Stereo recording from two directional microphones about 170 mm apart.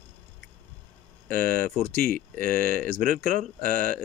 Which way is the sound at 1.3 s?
60° right (ahead or behind).